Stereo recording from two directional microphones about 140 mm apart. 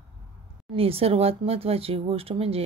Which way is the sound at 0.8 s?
45° right (ahead or behind).